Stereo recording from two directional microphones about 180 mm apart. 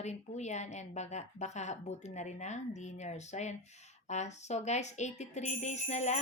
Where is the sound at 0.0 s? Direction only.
40° left (ahead or behind).